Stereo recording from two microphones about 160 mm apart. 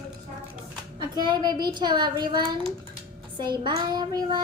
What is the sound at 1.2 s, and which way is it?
A child's voice, 25° right (ahead or behind).